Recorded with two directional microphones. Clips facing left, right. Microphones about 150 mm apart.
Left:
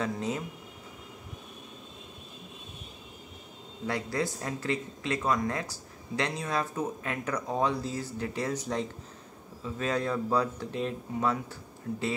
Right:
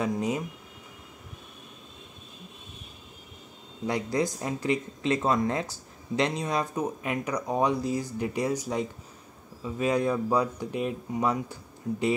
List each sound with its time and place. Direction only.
0.0 s speech: 15° right (ahead or behind)
3.8 s speech: 15° right (ahead or behind)